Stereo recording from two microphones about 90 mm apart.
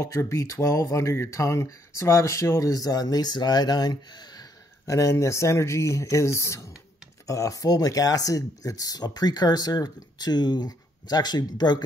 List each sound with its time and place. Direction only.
0.0 s speech: 30° left (ahead or behind); by 11.8 s 50° left (ahead or behind)